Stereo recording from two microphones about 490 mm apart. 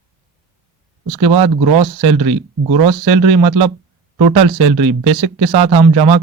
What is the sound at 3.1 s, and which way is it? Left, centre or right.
Speech, centre.